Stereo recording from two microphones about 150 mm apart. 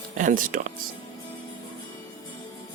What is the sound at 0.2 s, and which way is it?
Speech, 60° right (ahead or behind).